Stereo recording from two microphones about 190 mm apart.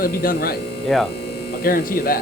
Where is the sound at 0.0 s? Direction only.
50° left (ahead or behind).